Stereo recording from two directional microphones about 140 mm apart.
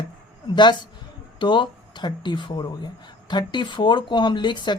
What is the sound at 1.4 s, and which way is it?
Speech, 35° left (ahead or behind).